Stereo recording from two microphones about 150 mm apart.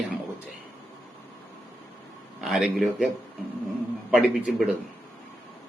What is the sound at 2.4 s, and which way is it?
Speech, 5° right (ahead or behind).